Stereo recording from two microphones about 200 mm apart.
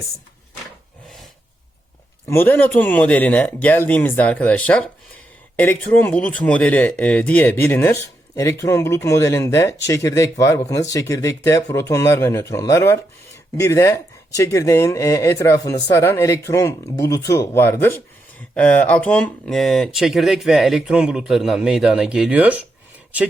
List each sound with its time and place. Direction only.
2.2 s speech: 10° left (ahead or behind); by 22.6 s 5° right (ahead or behind)